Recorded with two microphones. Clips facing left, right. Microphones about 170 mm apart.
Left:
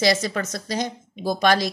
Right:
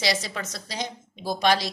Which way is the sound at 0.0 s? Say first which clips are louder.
Left 6 dB; 50° left (ahead or behind).